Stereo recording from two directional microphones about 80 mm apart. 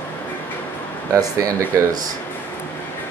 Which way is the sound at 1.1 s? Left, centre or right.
Right.